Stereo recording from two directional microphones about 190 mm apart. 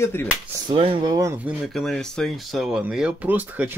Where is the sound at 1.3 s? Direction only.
5° right (ahead or behind).